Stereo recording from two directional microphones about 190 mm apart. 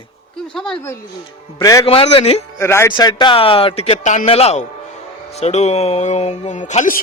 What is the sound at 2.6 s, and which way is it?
A man's voice, 15° left (ahead or behind).